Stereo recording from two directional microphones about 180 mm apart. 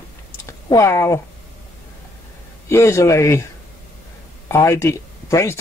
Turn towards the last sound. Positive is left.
turn(degrees=15)  # may be behind; listen again after turning